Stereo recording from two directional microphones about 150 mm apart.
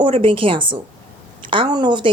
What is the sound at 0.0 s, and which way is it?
Speech, 35° right (ahead or behind).